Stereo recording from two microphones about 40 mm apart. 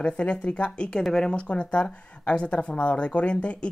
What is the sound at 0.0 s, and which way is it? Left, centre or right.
Speech, left.